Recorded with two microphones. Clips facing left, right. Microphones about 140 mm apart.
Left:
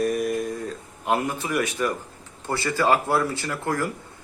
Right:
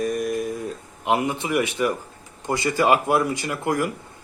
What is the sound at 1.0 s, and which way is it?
Speech, 15° right (ahead or behind).